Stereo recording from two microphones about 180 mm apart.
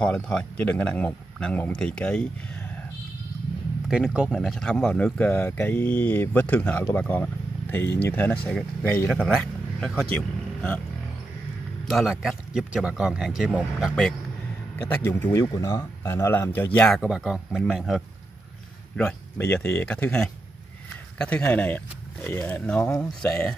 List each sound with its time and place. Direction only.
0.0 s speech: 5° left (ahead or behind)
3.9 s speech: 5° right (ahead or behind)
11.9 s speech: centre (ahead or behind)
14.8 s speech: 10° left (ahead or behind)
18.9 s speech: 10° left (ahead or behind)